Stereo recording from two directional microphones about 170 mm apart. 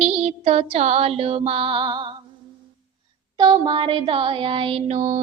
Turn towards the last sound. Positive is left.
turn(degrees=-30)  # may be behind; listen again after turning